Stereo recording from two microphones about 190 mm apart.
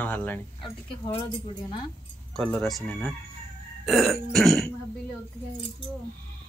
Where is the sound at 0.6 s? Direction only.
25° left (ahead or behind).